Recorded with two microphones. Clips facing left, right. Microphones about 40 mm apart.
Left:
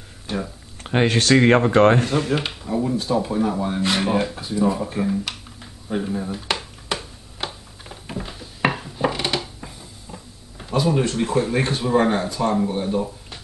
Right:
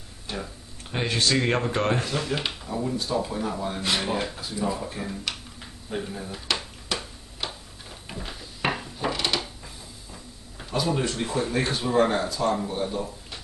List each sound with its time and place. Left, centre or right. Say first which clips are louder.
0.8 s speech: left 6 dB; left
1.3 s speech: left 13 dB; left
2.3 s speech: left 6 dB; centre
6.4 s a sound: left 3 dB; left
10.6 s a sound: left 5 dB; centre
11.1 s speech: left 5 dB; left
12.5 s speech: left 6 dB; centre